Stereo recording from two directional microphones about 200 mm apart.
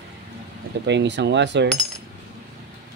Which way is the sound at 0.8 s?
60° right (ahead or behind).